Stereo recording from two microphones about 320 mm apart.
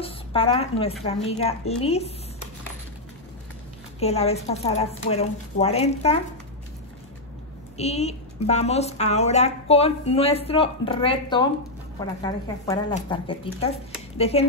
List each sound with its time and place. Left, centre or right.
0.0 s a woman's voice: centre
4.0 s a woman's voice: centre
7.7 s a woman's voice: centre